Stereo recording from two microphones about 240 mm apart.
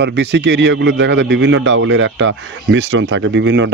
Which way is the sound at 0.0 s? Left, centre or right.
Right.